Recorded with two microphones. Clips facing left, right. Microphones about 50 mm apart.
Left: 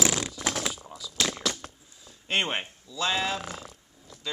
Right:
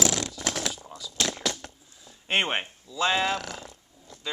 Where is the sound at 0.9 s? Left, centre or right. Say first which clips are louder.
Even; centre.